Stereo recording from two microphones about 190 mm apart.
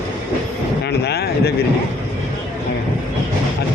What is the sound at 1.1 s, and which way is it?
Speech, 55° left (ahead or behind).